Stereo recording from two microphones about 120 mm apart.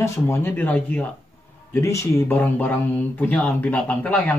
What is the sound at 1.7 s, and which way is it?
A man's voice, 25° left (ahead or behind).